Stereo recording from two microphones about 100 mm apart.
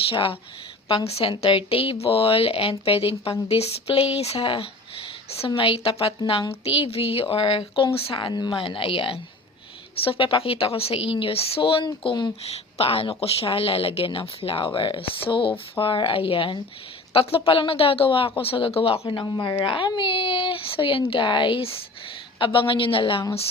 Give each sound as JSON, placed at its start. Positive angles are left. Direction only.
{"t": 0.1, "sound": "speech", "side_deg": 65}
{"t": 0.9, "sound": "speech", "side_deg": 85}
{"t": 6.7, "sound": "speech", "side_deg": 80}
{"t": 8.3, "sound": "a woman's voice", "side_deg": 40}
{"t": 8.5, "sound": "speech", "side_deg": 60}
{"t": 12.0, "sound": "speech", "side_deg": 50}
{"t": 12.7, "sound": "speech", "side_deg": 75}
{"t": 19.2, "sound": "speech", "side_deg": 45}